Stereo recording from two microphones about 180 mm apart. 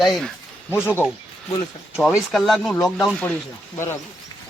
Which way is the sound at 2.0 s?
Centre (ahead or behind).